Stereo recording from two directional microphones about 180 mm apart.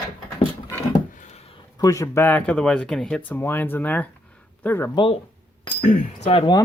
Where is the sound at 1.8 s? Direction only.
20° left (ahead or behind).